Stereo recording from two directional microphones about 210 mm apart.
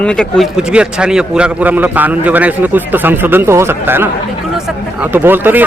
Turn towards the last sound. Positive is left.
turn(degrees=-10)  # may be behind; listen again after turning